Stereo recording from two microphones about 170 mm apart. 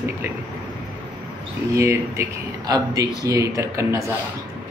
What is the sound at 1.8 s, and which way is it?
Speech, 15° right (ahead or behind).